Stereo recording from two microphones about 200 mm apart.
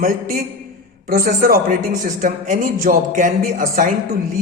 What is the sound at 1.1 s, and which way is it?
Speech, 45° right (ahead or behind).